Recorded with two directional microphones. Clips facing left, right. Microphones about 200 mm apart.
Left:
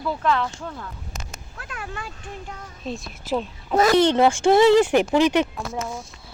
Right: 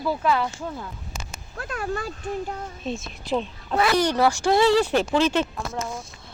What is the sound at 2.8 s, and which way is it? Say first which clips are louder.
Speech: left 3 dB; centre (ahead or behind).